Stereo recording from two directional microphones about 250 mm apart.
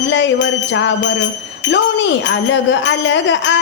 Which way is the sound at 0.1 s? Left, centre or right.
Left.